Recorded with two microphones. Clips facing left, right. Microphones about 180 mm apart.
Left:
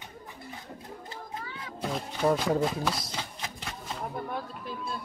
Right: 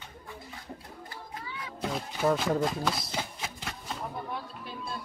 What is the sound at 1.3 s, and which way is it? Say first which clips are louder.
Music: even; 25° left (ahead or behind).